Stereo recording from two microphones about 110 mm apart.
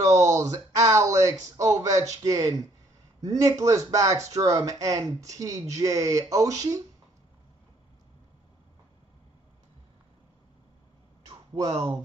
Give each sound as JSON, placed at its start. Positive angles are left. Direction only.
{"t": 0.0, "sound": "speech", "side_deg": -30}